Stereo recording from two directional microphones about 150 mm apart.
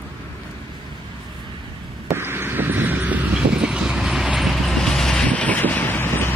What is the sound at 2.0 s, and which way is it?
Vehicle, 15° right (ahead or behind).